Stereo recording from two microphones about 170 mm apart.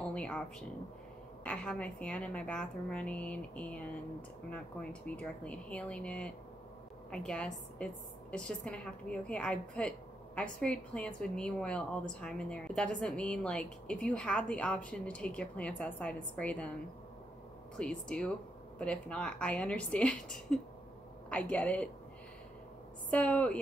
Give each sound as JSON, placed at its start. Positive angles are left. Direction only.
{"t": 0.0, "sound": "a woman's voice", "side_deg": 5}
{"t": 5.0, "sound": "a woman's voice", "side_deg": 10}
{"t": 17.7, "sound": "a woman's voice", "side_deg": 5}
{"t": 23.0, "sound": "a woman's voice", "side_deg": 10}